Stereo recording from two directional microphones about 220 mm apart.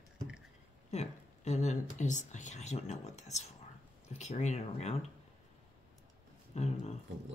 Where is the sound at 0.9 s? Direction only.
30° left (ahead or behind).